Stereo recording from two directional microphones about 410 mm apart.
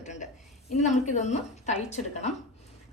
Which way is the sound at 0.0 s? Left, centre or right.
Centre.